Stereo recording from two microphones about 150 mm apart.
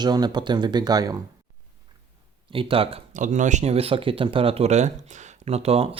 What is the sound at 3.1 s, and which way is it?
Speech, 55° right (ahead or behind).